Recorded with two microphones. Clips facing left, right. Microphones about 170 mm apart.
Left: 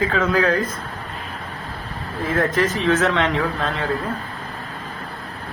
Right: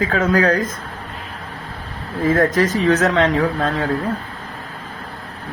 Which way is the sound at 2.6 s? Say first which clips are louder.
Right 3 dB; 40° right (ahead or behind).